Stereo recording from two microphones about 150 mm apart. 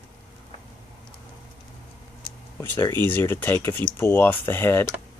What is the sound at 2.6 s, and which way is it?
Speech, 15° left (ahead or behind).